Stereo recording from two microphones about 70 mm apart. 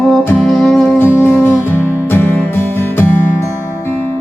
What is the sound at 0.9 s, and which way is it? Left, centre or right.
Music, left.